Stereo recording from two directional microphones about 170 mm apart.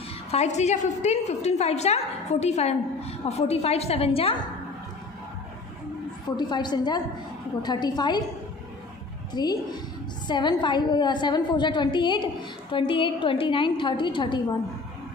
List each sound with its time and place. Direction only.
0.3 s a woman's voice: 40° left (ahead or behind)
6.3 s a woman's voice: 25° left (ahead or behind)
9.3 s a woman's voice: 25° left (ahead or behind)